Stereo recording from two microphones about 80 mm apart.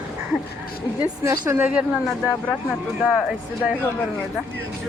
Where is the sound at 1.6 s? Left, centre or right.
Centre.